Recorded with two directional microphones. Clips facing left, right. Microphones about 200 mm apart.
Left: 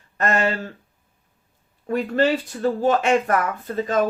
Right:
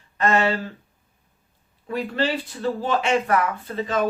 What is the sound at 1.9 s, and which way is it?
Speech, 45° left (ahead or behind).